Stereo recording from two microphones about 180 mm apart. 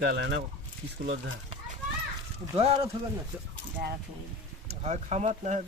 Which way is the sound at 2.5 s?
35° right (ahead or behind).